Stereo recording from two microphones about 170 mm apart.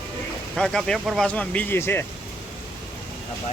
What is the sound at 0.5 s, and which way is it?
Speech, 5° left (ahead or behind).